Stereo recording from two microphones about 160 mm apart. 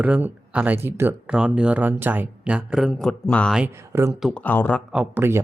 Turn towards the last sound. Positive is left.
turn(degrees=-5)  # may be behind; listen again after turning